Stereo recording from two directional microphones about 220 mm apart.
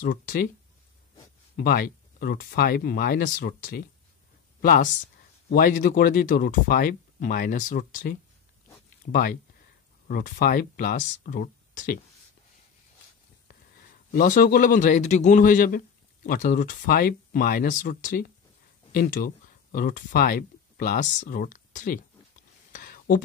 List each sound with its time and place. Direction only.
0.0 s speech: 40° left (ahead or behind)
1.6 s speech: 45° left (ahead or behind)
14.1 s speech: 40° left (ahead or behind)
22.7 s a sound: 40° left (ahead or behind)